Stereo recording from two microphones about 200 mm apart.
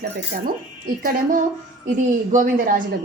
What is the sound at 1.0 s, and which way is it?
A woman's voice, 40° right (ahead or behind).